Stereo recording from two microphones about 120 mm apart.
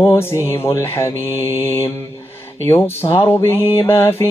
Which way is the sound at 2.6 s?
20° left (ahead or behind).